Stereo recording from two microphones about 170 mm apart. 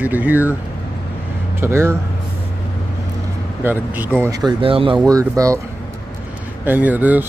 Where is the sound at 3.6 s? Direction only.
10° right (ahead or behind).